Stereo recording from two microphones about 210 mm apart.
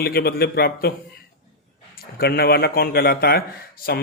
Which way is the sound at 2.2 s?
45° left (ahead or behind).